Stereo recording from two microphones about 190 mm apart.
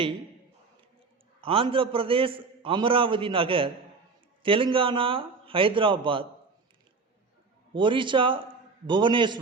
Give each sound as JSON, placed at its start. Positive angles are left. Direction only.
{"t": 1.4, "sound": "a man's voice", "side_deg": -30}
{"t": 7.7, "sound": "a man's voice", "side_deg": -25}